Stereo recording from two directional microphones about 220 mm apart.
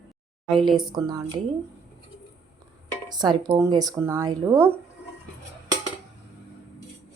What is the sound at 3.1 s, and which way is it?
A woman's voice, 20° right (ahead or behind).